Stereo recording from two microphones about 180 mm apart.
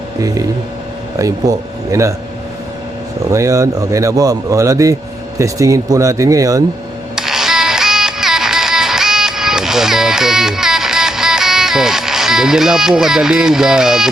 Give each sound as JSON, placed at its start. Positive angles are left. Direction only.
{"t": 1.2, "sound": "speech", "side_deg": -20}
{"t": 3.3, "sound": "speech", "side_deg": -20}
{"t": 7.2, "sound": "music", "side_deg": 0}